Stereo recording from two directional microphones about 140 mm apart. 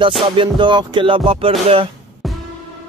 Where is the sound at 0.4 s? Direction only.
35° right (ahead or behind).